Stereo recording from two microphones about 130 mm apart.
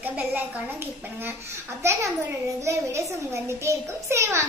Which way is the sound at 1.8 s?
20° right (ahead or behind).